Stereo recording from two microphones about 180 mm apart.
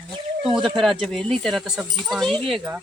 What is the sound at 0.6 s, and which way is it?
Speech, centre (ahead or behind).